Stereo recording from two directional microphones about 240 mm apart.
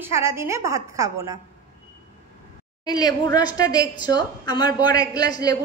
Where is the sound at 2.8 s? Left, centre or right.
Centre.